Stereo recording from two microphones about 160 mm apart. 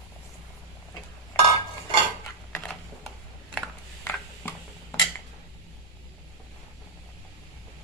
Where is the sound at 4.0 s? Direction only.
15° left (ahead or behind).